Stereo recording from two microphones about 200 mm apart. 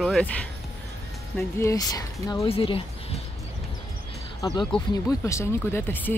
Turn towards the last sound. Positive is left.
turn(degrees=10)  # may be behind; listen again after turning